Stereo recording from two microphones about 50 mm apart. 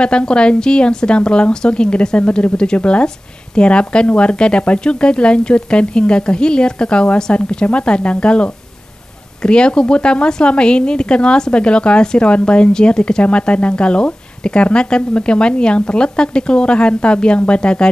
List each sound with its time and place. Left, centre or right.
0.0 s a woman's voice: centre